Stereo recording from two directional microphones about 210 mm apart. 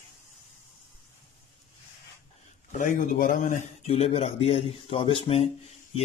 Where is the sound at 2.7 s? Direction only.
40° left (ahead or behind).